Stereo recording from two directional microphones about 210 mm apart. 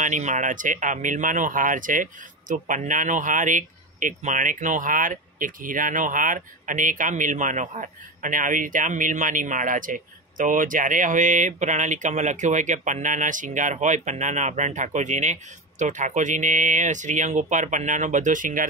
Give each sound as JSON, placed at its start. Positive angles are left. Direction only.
{"t": 0.0, "sound": "speech", "side_deg": -35}